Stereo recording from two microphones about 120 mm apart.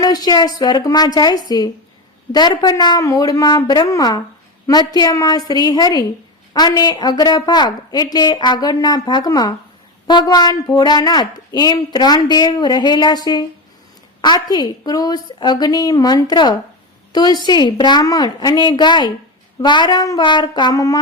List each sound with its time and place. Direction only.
0.3 s a woman's voice: 35° left (ahead or behind)